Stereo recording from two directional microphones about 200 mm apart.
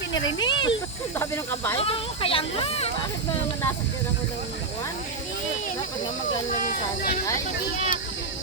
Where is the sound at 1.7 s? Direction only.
25° left (ahead or behind).